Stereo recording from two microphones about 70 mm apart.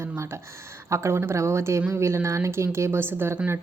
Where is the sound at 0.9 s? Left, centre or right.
Right.